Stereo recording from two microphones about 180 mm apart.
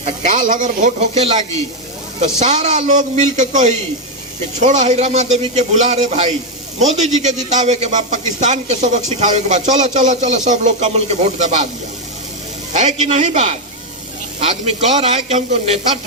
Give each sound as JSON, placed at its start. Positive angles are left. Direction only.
{"t": 0.0, "sound": "a man's voice", "side_deg": -45}
{"t": 12.7, "sound": "a man's voice", "side_deg": -40}